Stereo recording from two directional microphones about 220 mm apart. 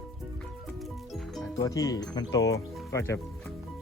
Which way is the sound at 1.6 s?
15° left (ahead or behind).